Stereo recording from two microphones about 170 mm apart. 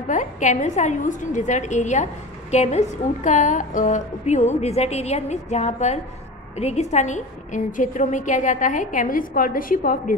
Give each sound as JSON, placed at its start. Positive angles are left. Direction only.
{"t": 0.1, "sound": "a woman's voice", "side_deg": 45}